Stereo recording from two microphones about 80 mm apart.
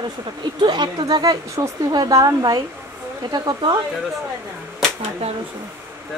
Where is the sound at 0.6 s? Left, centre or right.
Right.